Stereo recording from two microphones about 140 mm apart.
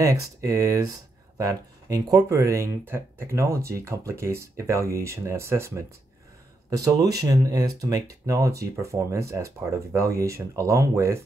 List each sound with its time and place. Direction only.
0.0 s speech: 25° right (ahead or behind)